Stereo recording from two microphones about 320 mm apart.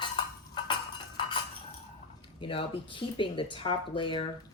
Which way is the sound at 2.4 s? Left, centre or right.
Centre.